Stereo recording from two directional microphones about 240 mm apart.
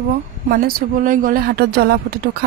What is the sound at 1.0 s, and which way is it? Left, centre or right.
A woman's voice, right.